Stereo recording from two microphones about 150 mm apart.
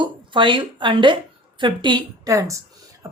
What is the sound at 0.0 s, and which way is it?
A woman's voice, 35° right (ahead or behind).